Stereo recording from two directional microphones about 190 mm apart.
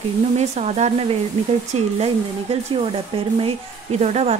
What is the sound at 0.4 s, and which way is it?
A woman's voice, 35° right (ahead or behind).